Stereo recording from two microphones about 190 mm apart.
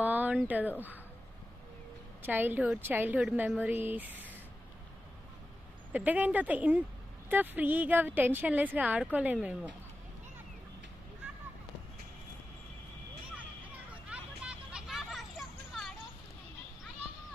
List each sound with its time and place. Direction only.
0.0 s speech: 10° right (ahead or behind)
2.2 s a woman's voice: 10° right (ahead or behind)
5.9 s a woman's voice: 10° right (ahead or behind)
14.0 s hubbub: 5° right (ahead or behind)